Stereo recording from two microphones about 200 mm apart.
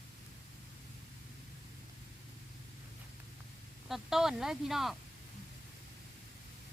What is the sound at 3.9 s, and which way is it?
Speech, centre (ahead or behind).